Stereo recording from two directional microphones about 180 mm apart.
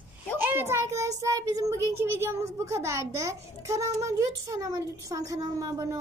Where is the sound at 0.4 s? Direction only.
10° right (ahead or behind).